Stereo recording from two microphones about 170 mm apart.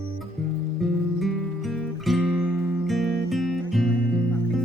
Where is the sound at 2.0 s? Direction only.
5° right (ahead or behind).